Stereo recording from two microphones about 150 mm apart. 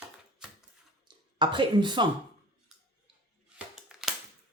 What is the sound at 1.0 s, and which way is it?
Speech, 30° right (ahead or behind).